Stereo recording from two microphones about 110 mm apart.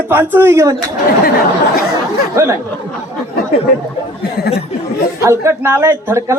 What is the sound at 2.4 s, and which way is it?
Speech, 25° right (ahead or behind).